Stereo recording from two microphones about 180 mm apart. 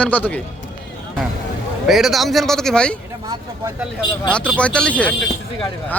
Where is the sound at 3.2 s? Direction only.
20° right (ahead or behind).